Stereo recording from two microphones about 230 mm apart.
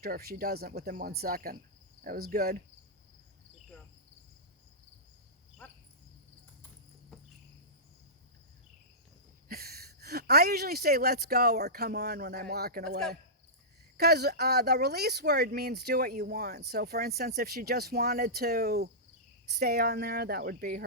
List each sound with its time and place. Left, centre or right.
0.0 s speech: right
7.1 s cricket: centre
9.5 s speech: right